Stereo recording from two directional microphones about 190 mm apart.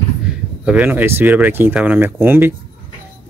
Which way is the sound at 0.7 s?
10° right (ahead or behind).